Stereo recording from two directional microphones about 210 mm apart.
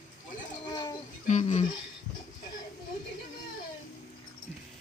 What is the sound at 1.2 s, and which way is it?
Speech, 35° left (ahead or behind).